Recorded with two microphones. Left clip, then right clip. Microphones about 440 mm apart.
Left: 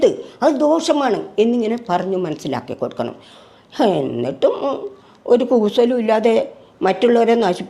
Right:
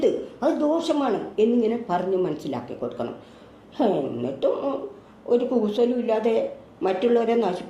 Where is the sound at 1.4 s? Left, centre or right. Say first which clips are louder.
Left 2 dB; left.